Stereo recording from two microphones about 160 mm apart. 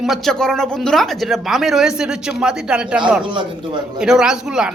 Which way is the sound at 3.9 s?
5° right (ahead or behind).